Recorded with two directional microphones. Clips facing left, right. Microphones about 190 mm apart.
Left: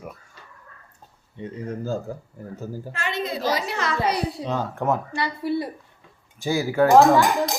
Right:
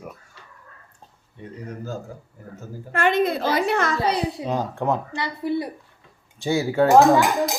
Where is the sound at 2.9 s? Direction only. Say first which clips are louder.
Right 9 dB; 55° right (ahead or behind).